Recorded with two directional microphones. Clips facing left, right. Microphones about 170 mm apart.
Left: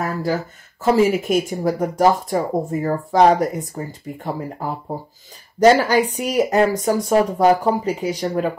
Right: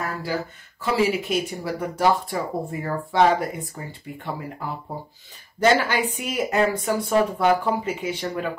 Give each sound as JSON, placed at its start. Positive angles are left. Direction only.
{"t": 0.8, "sound": "speech", "side_deg": 45}